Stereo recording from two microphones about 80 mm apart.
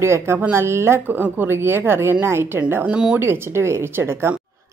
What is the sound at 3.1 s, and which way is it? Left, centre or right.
A woman's voice, right.